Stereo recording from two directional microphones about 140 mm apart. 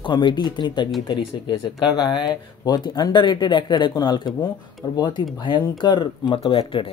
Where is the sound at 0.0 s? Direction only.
35° left (ahead or behind).